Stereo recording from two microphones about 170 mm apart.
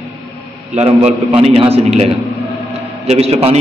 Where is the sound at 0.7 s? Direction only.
35° right (ahead or behind).